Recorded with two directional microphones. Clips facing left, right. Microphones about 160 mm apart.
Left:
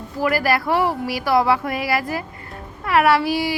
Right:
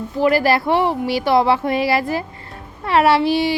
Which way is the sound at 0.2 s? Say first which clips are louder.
Right 4 dB; 25° right (ahead or behind).